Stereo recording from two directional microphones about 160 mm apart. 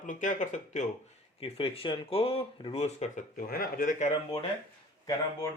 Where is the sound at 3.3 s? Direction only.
65° left (ahead or behind).